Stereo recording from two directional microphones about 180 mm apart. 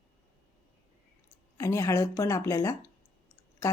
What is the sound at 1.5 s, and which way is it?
Speech, 15° left (ahead or behind).